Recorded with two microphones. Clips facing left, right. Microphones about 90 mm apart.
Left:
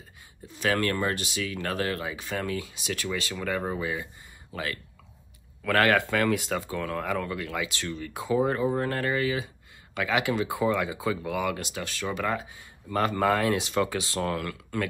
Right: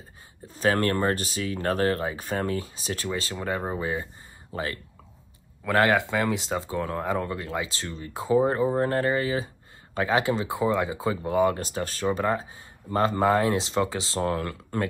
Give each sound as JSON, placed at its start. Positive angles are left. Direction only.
{"t": 0.5, "sound": "speech", "side_deg": -35}
{"t": 5.6, "sound": "speech", "side_deg": -20}